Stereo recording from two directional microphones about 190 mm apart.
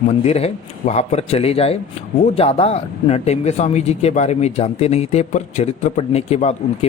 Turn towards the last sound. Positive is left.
turn(degrees=35)  # may be behind; listen again after turning